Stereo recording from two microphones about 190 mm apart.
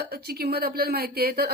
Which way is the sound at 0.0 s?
55° right (ahead or behind).